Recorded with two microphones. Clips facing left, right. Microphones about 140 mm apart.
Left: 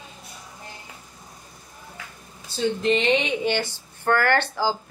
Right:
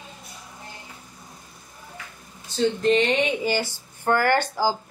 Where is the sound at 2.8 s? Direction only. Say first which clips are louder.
Even; centre (ahead or behind).